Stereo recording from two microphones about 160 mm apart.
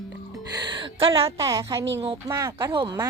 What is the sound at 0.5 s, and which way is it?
Speech, 30° right (ahead or behind).